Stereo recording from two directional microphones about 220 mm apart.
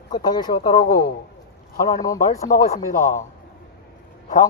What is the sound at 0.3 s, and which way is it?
Speech, 20° left (ahead or behind).